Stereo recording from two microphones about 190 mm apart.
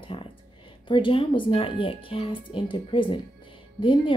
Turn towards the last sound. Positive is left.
turn(degrees=25)  # may be behind; listen again after turning